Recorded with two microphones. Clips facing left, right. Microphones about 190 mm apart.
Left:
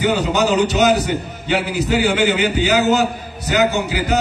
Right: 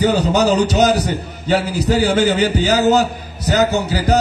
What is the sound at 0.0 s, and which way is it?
A man's voice, 40° right (ahead or behind).